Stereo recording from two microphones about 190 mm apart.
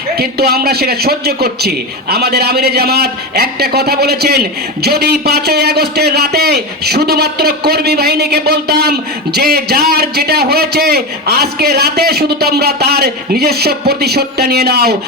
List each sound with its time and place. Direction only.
0.2 s a man's voice: 55° right (ahead or behind)